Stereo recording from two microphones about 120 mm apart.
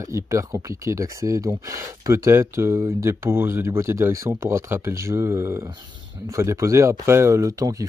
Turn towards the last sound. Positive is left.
turn(degrees=-25)  # may be behind; listen again after turning